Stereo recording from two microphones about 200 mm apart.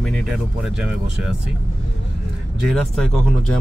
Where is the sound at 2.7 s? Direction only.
Centre (ahead or behind).